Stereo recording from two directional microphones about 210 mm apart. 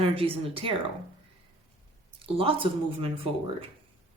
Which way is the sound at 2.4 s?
25° right (ahead or behind).